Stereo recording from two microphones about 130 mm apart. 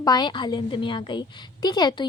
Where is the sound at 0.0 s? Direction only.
30° left (ahead or behind).